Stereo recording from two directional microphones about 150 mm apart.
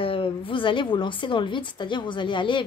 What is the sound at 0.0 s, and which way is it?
A woman's voice, 35° left (ahead or behind).